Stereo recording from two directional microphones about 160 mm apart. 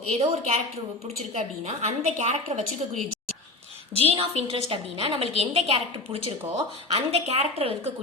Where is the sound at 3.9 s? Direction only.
35° right (ahead or behind).